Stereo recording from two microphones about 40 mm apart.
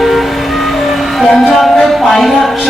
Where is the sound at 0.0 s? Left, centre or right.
Centre.